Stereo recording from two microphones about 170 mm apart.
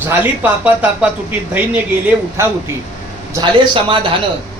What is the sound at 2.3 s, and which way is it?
Speech, 15° right (ahead or behind).